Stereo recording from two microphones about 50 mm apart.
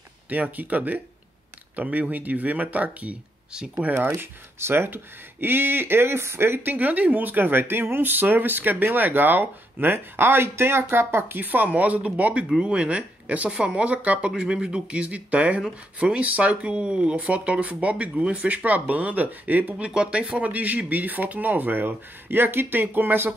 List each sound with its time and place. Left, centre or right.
0.3 s speech: right
3.9 s speech: right
11.3 s speech: right
19.8 s speech: right